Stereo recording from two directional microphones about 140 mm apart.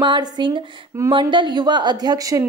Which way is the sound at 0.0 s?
35° right (ahead or behind).